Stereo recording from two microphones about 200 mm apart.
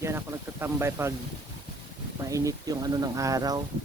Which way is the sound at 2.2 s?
15° right (ahead or behind).